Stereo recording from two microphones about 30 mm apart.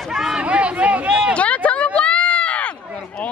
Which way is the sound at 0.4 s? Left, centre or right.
Right.